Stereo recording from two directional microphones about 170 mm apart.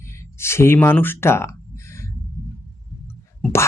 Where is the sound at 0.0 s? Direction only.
15° left (ahead or behind).